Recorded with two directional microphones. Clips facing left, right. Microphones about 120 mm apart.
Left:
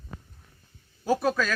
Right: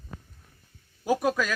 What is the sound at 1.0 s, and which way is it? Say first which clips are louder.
Speech: even; 15° right (ahead or behind).